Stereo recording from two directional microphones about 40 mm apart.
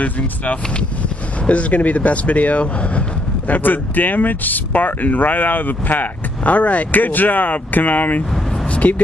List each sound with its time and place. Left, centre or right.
1.5 s speech: left
3.5 s speech: left
8.7 s a sound: left